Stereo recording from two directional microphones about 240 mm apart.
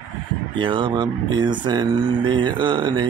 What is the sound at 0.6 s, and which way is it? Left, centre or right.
Mantra, right.